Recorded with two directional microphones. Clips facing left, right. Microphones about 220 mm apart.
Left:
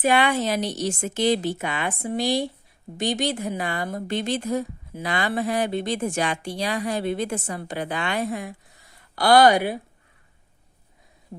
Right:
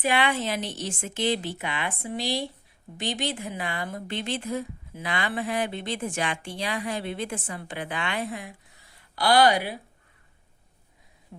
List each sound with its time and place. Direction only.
0.0 s a woman's voice: 45° left (ahead or behind)